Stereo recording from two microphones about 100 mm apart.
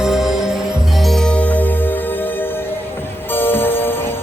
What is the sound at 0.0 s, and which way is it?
Music, 5° right (ahead or behind).